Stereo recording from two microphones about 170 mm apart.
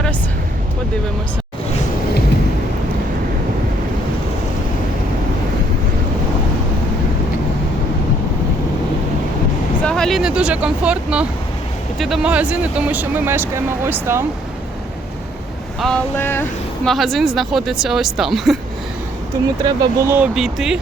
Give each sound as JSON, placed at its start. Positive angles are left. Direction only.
{"t": 9.8, "sound": "vehicle", "side_deg": 5}
{"t": 11.9, "sound": "speech", "side_deg": 0}
{"t": 15.8, "sound": "vehicle", "side_deg": 5}
{"t": 16.9, "sound": "speech", "side_deg": 0}
{"t": 19.3, "sound": "speech", "side_deg": -20}
{"t": 20.1, "sound": "speech", "side_deg": -10}